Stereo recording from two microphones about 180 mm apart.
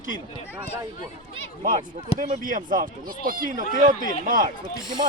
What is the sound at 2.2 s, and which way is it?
Speech, 45° right (ahead or behind).